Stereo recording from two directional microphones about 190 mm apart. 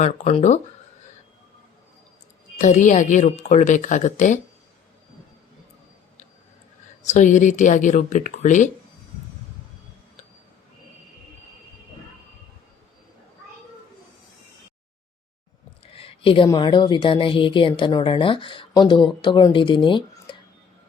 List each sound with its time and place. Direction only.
0.0 s speech: 35° left (ahead or behind)
2.6 s speech: 40° left (ahead or behind)
7.0 s speech: 40° left (ahead or behind)
15.8 s a woman's voice: 30° left (ahead or behind)